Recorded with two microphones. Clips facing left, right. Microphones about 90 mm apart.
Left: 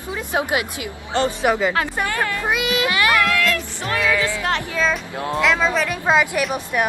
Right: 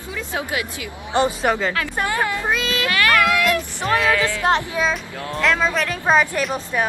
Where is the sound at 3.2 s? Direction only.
15° right (ahead or behind).